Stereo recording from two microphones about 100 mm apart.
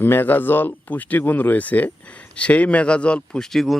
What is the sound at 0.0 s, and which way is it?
Speech, 20° left (ahead or behind).